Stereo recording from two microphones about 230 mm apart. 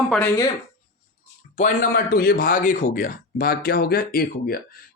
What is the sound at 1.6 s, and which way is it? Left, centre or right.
A man's voice, left.